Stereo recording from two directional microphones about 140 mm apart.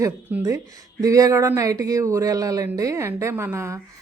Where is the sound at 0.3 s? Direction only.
10° right (ahead or behind).